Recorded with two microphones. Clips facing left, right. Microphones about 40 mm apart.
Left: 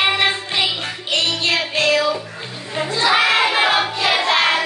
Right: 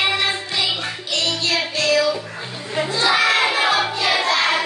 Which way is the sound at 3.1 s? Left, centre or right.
Left.